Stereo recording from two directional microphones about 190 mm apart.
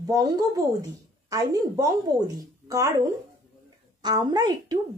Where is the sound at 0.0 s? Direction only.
20° right (ahead or behind).